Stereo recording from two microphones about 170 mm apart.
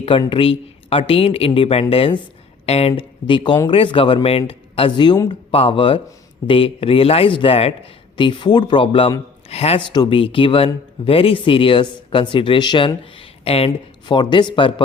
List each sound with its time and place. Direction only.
0.0 s speech: 30° left (ahead or behind)